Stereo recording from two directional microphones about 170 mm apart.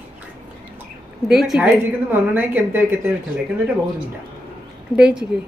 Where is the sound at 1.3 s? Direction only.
Centre (ahead or behind).